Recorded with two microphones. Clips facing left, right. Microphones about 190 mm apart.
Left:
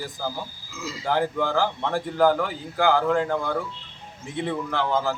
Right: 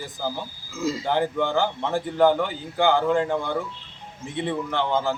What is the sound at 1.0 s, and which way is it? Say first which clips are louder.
A man's voice: left 2 dB; centre (ahead or behind).